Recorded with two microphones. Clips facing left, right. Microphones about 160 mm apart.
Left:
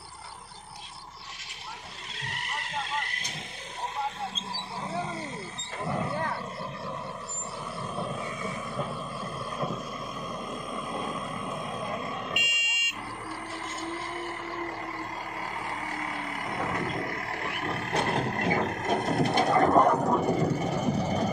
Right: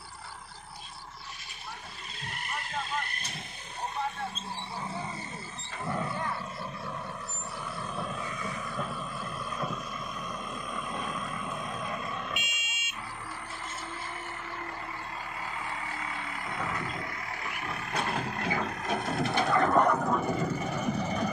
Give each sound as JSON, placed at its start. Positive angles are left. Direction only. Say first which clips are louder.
{"t": 2.1, "sound": "vehicle", "louder": "left 1 dB", "side_deg": 85}
{"t": 8.2, "sound": "wild animals", "louder": "left 2 dB", "side_deg": 25}
{"t": 10.2, "sound": "vehicle", "louder": "left 3 dB", "side_deg": 25}
{"t": 12.4, "sound": "buzzer", "louder": "left 3 dB", "side_deg": 80}
{"t": 15.9, "sound": "vehicle", "louder": "left 3 dB", "side_deg": 40}
{"t": 18.0, "sound": "a sound", "louder": "left 4 dB", "side_deg": 45}
{"t": 19.9, "sound": "vehicle", "louder": "left 3 dB", "side_deg": 20}
{"t": 20.2, "sound": "vehicle", "louder": "left 4 dB", "side_deg": 35}
{"t": 20.6, "sound": "vehicle", "louder": "left 4 dB", "side_deg": 15}
{"t": 20.9, "sound": "vehicle", "louder": "left 3 dB", "side_deg": 30}